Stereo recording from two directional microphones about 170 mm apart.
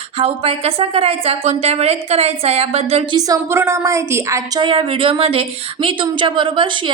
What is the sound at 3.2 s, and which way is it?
A woman's voice, 20° right (ahead or behind).